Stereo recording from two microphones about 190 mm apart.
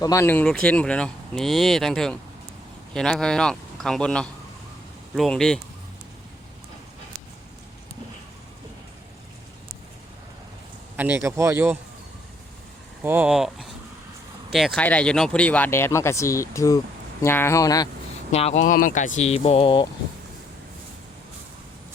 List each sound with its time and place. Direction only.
0.0 s speech: 15° left (ahead or behind)
10.9 s speech: 10° right (ahead or behind)
13.0 s speech: 10° right (ahead or behind); by 17.8 s 20° left (ahead or behind)
18.3 s speech: 35° left (ahead or behind)